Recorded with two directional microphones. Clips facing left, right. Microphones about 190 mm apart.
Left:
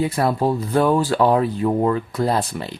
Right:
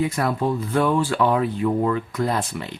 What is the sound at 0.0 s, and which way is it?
Speech, 30° left (ahead or behind).